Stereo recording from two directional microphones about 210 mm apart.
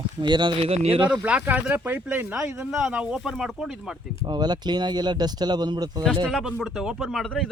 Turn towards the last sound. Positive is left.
turn(degrees=0)  # may be behind; listen again after turning